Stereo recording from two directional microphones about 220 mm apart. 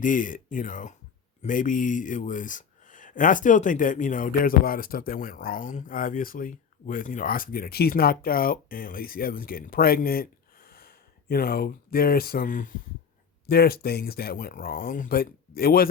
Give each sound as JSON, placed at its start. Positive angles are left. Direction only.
{"t": 0.0, "sound": "speech", "side_deg": 35}